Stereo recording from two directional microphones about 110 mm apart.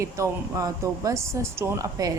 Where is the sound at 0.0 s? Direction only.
25° right (ahead or behind).